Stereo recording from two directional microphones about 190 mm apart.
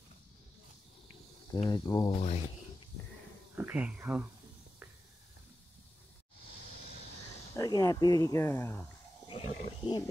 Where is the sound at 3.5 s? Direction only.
10° right (ahead or behind).